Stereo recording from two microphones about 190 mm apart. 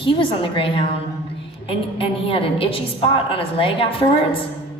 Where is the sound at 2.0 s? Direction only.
30° left (ahead or behind).